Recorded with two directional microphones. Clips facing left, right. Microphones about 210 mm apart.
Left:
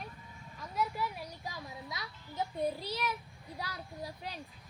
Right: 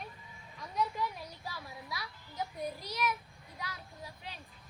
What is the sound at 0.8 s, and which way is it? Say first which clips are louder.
A woman's voice: even; 10° left (ahead or behind).